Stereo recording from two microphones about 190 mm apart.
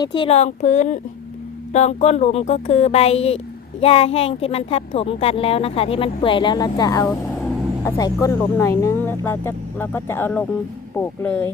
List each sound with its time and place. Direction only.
0.0 s speech: 25° left (ahead or behind); by 11.5 s 10° left (ahead or behind)